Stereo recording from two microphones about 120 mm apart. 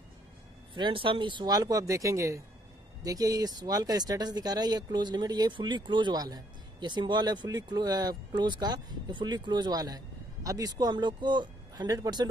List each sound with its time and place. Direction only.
0.7 s speech: 45° right (ahead or behind)